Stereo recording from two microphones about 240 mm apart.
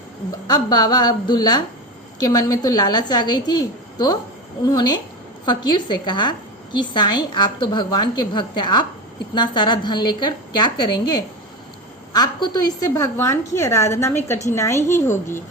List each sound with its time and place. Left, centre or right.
0.4 s a woman's voice: centre